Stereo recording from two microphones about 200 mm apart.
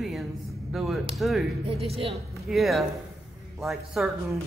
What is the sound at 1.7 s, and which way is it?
Speech, 30° right (ahead or behind).